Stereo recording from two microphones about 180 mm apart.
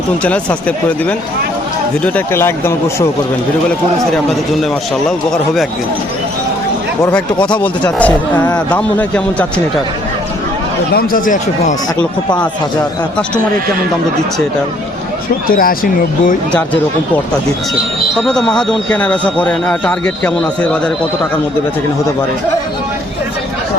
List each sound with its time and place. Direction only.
2.1 s speech: 15° left (ahead or behind)
7.6 s speech: 5° left (ahead or behind)
10.9 s speech: 50° left (ahead or behind)
15.4 s speech: 55° left (ahead or behind)
18.2 s speech: 5° left (ahead or behind)